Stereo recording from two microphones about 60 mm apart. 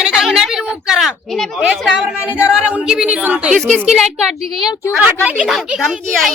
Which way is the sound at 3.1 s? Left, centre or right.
Right.